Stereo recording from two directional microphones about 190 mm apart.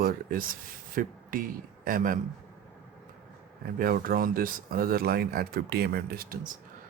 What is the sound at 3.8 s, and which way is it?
Speech, 50° right (ahead or behind).